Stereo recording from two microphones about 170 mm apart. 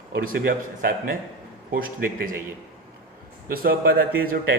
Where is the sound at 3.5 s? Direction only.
60° right (ahead or behind).